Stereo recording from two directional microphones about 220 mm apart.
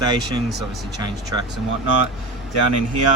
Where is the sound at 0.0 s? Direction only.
15° right (ahead or behind).